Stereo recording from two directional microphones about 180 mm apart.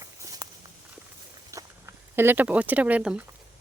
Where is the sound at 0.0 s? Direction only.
20° right (ahead or behind).